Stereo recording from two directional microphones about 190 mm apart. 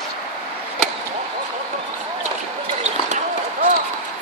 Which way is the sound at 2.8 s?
40° right (ahead or behind).